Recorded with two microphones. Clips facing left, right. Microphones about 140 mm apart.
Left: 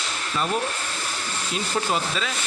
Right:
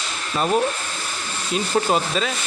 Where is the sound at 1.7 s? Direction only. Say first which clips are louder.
Right 5 dB; 40° right (ahead or behind).